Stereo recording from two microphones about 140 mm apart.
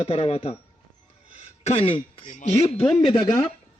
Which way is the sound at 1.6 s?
40° left (ahead or behind).